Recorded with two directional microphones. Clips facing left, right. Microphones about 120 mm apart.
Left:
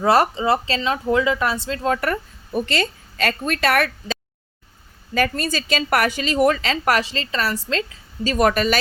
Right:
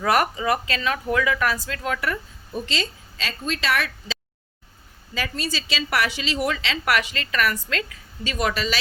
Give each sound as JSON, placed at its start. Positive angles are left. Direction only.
{"t": 0.0, "sound": "speech", "side_deg": 30}
{"t": 2.0, "sound": "a woman's voice", "side_deg": 55}